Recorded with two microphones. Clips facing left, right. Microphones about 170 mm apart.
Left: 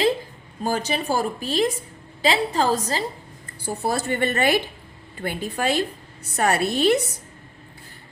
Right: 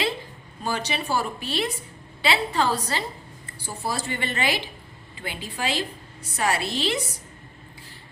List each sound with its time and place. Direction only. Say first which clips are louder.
0.6 s a woman's voice: left 4 dB; 45° left (ahead or behind)
3.7 s a woman's voice: left 6 dB; 55° left (ahead or behind)